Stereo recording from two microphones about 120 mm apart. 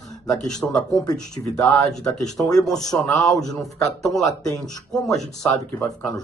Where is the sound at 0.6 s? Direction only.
5° left (ahead or behind).